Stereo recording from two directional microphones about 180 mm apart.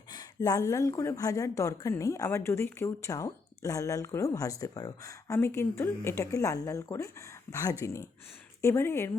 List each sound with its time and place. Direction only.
0.1 s a woman's voice: 20° left (ahead or behind)